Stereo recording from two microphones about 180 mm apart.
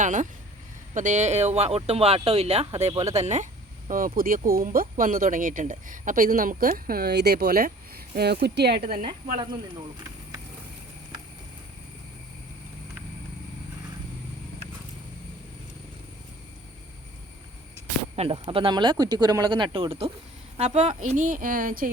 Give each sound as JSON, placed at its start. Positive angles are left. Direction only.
{"t": 0.0, "sound": "speech", "side_deg": -45}
{"t": 18.2, "sound": "speech", "side_deg": -30}